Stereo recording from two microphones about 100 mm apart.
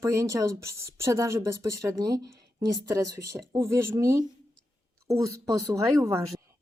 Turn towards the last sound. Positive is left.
turn(degrees=-30)  # may be behind; listen again after turning